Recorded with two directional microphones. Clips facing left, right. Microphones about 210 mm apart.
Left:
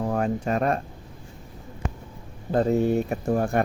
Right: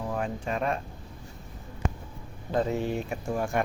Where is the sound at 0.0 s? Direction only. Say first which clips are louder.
Left 6 dB; 45° left (ahead or behind).